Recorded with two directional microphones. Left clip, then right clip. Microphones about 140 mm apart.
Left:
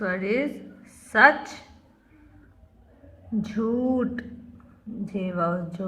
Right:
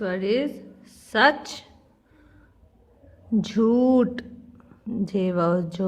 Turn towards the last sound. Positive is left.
turn(degrees=-75)  # may be behind; listen again after turning